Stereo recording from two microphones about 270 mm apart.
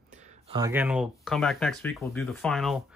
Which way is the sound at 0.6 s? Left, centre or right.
Centre.